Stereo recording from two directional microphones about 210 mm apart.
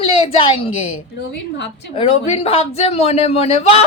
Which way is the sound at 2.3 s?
25° left (ahead or behind).